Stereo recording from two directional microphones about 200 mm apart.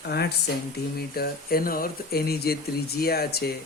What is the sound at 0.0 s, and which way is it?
Speech, 55° left (ahead or behind).